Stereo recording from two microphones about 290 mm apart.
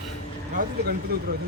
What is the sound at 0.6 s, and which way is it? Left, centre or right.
Speech, right.